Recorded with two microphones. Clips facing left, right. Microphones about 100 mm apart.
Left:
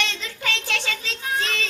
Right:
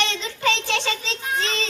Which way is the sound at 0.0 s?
20° right (ahead or behind).